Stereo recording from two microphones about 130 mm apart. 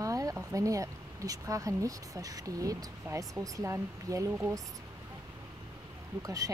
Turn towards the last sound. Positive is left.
turn(degrees=-25)  # may be behind; listen again after turning